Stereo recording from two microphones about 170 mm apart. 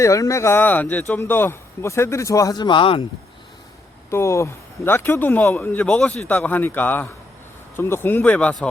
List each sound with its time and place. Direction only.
0.0 s speech: 20° left (ahead or behind)
4.1 s speech: 15° left (ahead or behind)